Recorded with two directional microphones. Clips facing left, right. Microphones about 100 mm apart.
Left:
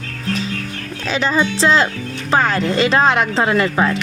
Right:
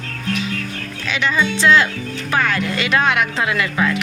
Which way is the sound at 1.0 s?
35° left (ahead or behind).